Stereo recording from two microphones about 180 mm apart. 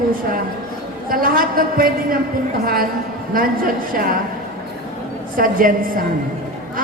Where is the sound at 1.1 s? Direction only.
55° right (ahead or behind).